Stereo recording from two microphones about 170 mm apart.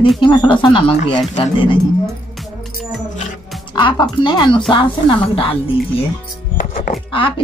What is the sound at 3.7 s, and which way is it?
A woman's voice, 30° left (ahead or behind).